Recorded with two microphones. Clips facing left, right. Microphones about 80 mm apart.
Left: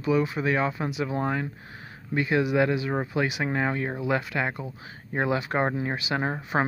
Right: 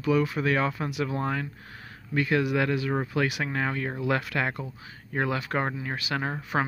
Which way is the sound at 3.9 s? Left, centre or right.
Centre.